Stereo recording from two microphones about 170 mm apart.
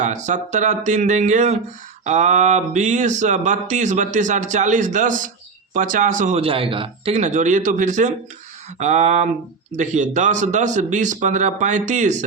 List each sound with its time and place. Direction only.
0.0 s speech: 45° right (ahead or behind)